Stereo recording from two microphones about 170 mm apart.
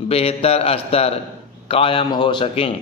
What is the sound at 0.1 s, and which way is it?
A man's voice, 35° left (ahead or behind).